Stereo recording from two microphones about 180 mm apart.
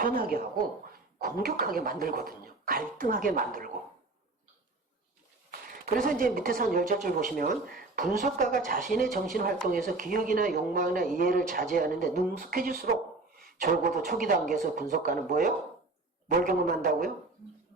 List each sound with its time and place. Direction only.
0.0 s speech: 50° right (ahead or behind)
5.5 s speech: 55° right (ahead or behind)
13.3 s a sound: 55° right (ahead or behind)
14.1 s speech: 50° right (ahead or behind)